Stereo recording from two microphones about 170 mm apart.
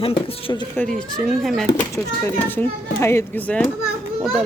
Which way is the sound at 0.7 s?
5° left (ahead or behind).